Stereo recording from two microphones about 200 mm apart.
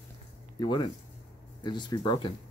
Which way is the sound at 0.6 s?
20° left (ahead or behind).